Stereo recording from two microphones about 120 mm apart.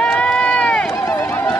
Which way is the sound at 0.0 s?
10° left (ahead or behind).